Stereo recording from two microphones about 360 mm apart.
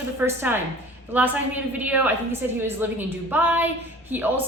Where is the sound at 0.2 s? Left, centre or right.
Centre.